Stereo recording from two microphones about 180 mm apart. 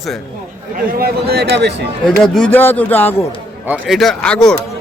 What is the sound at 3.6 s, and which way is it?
Speech, 5° right (ahead or behind).